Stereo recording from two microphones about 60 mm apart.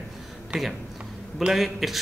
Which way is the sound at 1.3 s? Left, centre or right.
Centre.